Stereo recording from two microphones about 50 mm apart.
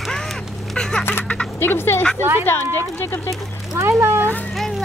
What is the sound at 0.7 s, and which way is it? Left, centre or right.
Speech, centre.